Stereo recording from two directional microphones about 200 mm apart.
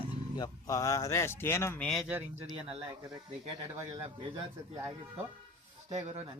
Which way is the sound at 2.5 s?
30° right (ahead or behind).